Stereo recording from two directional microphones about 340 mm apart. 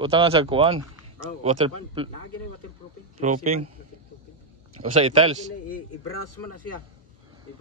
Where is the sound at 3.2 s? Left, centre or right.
Right.